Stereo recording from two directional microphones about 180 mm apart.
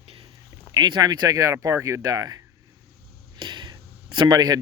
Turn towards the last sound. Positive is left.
turn(degrees=-20)  # may be behind; listen again after turning